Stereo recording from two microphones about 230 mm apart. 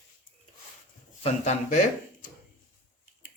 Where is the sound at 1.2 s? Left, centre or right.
Left.